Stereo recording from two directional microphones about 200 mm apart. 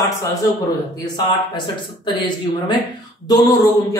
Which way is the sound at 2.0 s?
20° left (ahead or behind).